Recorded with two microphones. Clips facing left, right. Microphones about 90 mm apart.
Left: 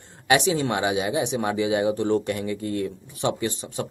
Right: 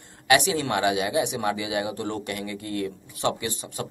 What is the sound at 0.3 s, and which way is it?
Speech, 25° left (ahead or behind).